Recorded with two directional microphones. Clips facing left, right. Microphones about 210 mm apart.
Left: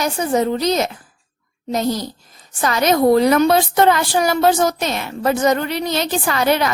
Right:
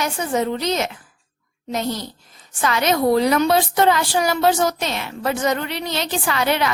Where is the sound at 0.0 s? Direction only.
40° left (ahead or behind).